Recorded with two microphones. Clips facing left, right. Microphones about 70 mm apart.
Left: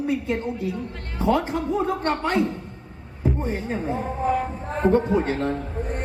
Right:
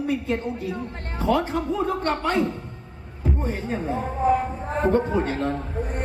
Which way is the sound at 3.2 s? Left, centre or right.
Left.